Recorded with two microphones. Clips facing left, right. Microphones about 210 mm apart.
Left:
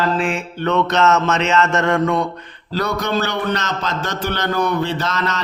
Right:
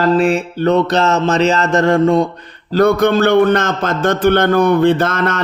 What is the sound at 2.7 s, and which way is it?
A man's voice, 55° right (ahead or behind).